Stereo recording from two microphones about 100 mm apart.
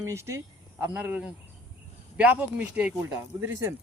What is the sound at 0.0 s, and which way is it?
Speech, 30° right (ahead or behind).